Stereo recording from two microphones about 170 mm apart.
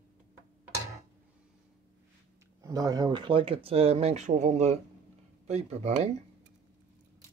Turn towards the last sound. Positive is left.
turn(degrees=-40)  # may be behind; listen again after turning